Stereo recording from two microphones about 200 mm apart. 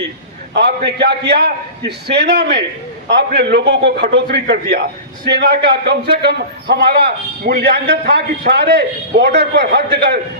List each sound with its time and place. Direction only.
0.9 s a man's voice: 55° right (ahead or behind)